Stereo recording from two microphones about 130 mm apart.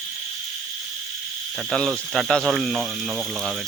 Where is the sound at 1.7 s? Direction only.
Centre (ahead or behind).